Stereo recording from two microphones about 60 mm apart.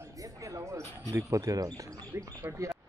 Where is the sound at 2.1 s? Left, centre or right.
Right.